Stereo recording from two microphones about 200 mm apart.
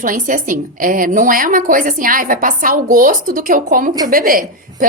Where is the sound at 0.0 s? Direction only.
40° right (ahead or behind).